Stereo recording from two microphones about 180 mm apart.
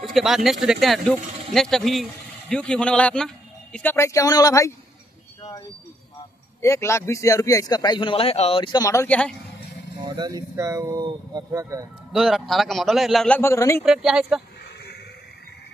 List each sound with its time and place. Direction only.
0.0 s a man's voice: centre (ahead or behind)
3.9 s speech: 15° left (ahead or behind)
6.6 s a man's voice: 15° left (ahead or behind)
10.0 s speech: 25° right (ahead or behind)
12.1 s speech: centre (ahead or behind)
13.4 s speech: 15° left (ahead or behind)
13.8 s speech: 5° right (ahead or behind)